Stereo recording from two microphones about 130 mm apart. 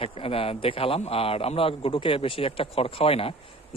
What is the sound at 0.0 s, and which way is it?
A man's voice, 45° left (ahead or behind).